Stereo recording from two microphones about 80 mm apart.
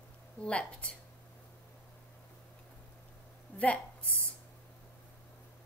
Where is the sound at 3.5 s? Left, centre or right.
Left.